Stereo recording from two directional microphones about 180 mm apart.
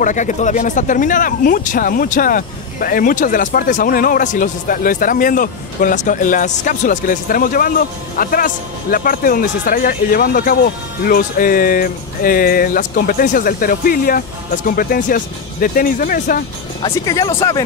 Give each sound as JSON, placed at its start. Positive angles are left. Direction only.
{"t": 0.0, "sound": "speech", "side_deg": 45}
{"t": 16.8, "sound": "speech", "side_deg": 20}